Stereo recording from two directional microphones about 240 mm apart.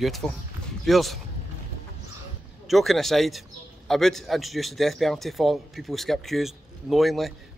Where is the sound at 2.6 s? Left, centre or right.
Centre.